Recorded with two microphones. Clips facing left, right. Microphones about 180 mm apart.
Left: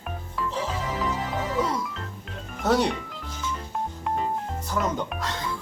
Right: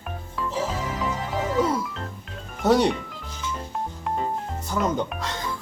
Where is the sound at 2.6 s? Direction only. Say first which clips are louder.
Right 3 dB; centre (ahead or behind).